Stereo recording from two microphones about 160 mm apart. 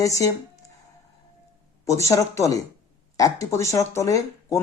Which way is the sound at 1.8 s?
20° left (ahead or behind).